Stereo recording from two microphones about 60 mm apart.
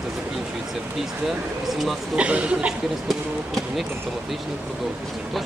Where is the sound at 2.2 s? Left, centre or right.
Centre.